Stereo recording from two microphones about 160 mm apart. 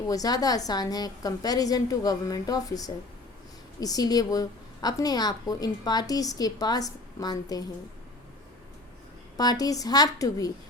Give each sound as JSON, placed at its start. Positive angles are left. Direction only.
{"t": 0.1, "sound": "a woman's voice", "side_deg": 20}
{"t": 9.4, "sound": "a woman's voice", "side_deg": 25}